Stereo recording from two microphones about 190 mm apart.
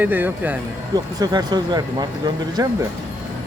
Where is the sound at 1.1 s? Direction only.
20° right (ahead or behind).